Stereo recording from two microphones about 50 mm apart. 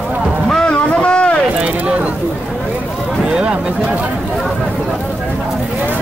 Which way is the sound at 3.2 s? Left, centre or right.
Centre.